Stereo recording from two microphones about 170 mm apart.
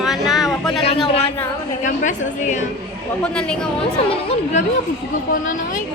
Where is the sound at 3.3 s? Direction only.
5° left (ahead or behind).